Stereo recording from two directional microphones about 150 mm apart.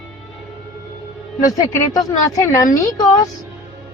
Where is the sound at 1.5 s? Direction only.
25° left (ahead or behind).